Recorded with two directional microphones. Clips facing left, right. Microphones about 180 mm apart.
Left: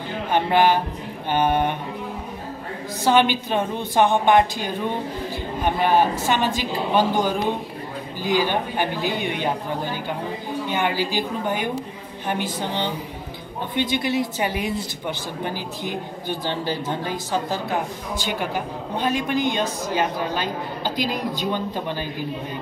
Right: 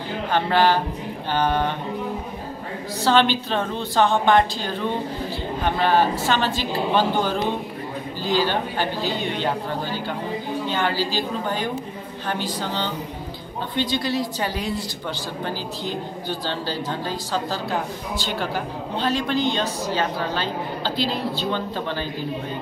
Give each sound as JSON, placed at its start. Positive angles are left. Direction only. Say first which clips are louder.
{"t": 0.3, "sound": "a woman's voice", "louder": "left 1 dB", "side_deg": 20}
{"t": 3.0, "sound": "a woman's voice", "louder": "left 1 dB", "side_deg": 15}
{"t": 15.9, "sound": "a woman's voice", "louder": "even", "side_deg": 20}